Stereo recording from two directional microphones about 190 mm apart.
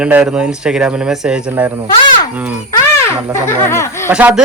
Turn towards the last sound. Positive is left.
turn(degrees=-5)  # may be behind; listen again after turning